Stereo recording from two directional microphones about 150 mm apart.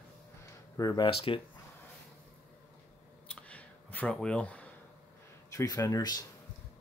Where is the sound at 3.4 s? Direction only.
10° left (ahead or behind).